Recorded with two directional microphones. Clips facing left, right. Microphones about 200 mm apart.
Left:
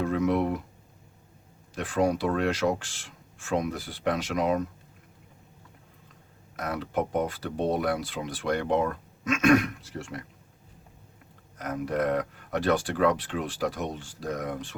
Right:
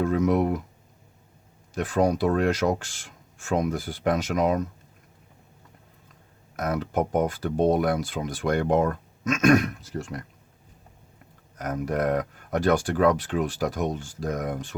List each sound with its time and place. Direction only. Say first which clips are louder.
0.0 s speech: right 3 dB; 45° right (ahead or behind)
1.7 s speech: right 3 dB; 45° right (ahead or behind)
6.6 s speech: right 3 dB; 45° right (ahead or behind)
11.5 s speech: right 2 dB; 45° right (ahead or behind)